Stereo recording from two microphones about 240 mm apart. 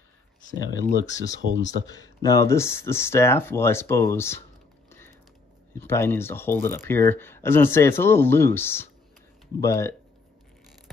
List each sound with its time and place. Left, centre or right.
0.6 s speech: centre
1.5 s speech: left
1.9 s speech: centre
4.8 s typing: centre
5.7 s speech: centre